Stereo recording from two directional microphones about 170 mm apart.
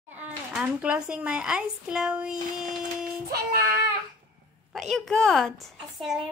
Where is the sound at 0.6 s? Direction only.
5° right (ahead or behind).